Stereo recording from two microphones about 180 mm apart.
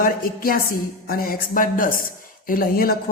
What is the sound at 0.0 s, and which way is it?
A woman's voice, 50° left (ahead or behind).